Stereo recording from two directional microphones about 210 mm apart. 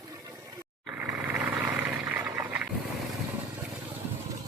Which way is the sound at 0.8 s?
5° right (ahead or behind).